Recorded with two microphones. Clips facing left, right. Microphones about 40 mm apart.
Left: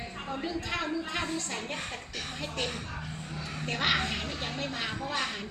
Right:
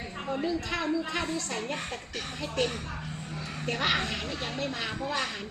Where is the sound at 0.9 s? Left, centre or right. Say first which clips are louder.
Right 3 dB; centre.